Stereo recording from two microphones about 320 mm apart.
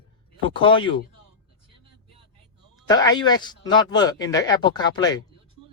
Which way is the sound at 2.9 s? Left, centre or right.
Centre.